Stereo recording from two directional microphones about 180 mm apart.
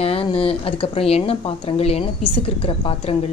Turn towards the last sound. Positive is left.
turn(degrees=30)  # may be behind; listen again after turning